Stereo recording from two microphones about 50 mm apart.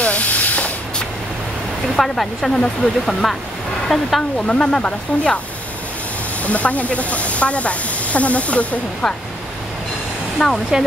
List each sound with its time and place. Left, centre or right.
0.0 s hiss: left
2.0 s speech: centre
4.5 s speech: centre
6.4 s speech: left
10.4 s speech: centre